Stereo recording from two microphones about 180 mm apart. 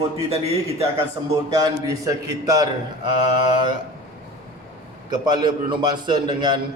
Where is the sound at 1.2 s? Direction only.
25° right (ahead or behind).